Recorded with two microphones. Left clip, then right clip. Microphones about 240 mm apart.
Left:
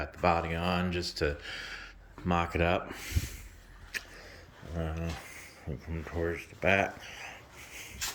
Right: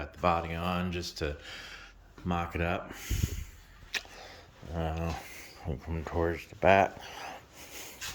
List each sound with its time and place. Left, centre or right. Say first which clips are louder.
0.0 s speech: left 1 dB; centre
4.8 s speech: right 3 dB; centre